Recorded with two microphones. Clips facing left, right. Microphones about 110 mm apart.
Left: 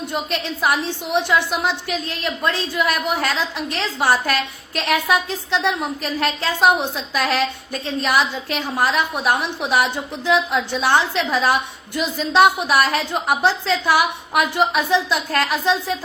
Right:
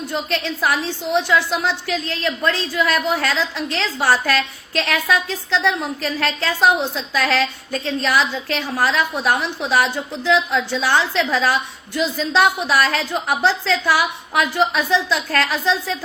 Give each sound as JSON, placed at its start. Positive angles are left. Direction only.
{"t": 0.6, "sound": "a woman's voice", "side_deg": 15}